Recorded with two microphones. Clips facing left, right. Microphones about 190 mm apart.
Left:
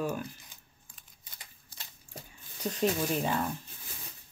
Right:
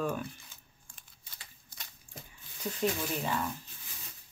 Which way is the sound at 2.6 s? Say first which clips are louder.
Left 3 dB; 35° left (ahead or behind).